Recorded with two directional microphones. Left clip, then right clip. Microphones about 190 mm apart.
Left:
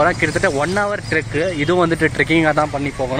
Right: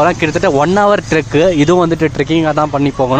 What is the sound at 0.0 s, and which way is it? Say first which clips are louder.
Speech: right 4 dB; 30° right (ahead or behind).